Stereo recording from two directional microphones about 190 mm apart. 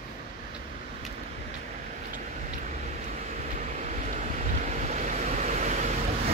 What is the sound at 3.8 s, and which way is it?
Vehicle, 40° right (ahead or behind).